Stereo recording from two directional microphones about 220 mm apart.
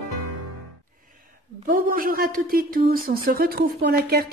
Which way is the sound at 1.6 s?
40° right (ahead or behind).